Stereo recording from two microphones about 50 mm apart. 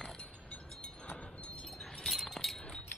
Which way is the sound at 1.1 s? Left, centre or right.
Left.